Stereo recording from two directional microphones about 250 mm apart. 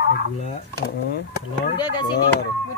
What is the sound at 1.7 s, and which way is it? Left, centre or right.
Speech, centre.